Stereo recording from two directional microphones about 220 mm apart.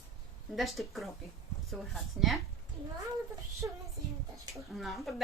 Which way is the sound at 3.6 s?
10° right (ahead or behind).